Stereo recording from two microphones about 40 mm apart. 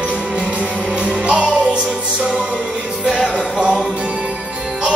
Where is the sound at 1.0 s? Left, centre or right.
Right.